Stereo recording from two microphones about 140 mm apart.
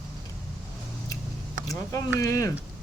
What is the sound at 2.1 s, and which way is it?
Speech, 25° left (ahead or behind).